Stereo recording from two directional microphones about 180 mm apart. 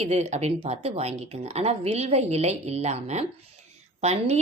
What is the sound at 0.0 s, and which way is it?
A woman's voice, 35° right (ahead or behind).